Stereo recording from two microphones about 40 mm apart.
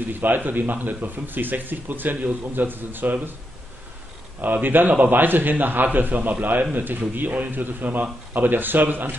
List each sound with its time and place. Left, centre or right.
0.2 s speech: right
4.4 s speech: right